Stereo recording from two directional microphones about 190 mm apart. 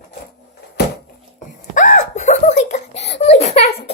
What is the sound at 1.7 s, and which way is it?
Giggle, 45° left (ahead or behind).